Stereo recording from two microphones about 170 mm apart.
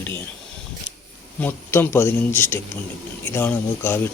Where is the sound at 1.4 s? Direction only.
10° left (ahead or behind).